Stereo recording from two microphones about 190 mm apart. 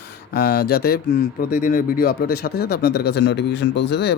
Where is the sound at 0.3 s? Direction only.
60° left (ahead or behind).